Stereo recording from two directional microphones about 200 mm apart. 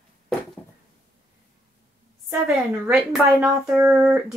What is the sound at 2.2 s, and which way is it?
Speech, 5° right (ahead or behind).